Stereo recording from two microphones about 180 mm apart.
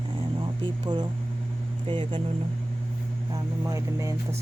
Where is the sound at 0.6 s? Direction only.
25° right (ahead or behind).